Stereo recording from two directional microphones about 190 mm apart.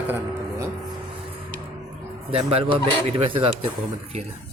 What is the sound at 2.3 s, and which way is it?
Speech, 30° right (ahead or behind).